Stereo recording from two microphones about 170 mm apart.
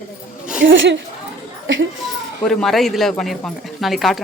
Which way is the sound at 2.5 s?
Centre (ahead or behind).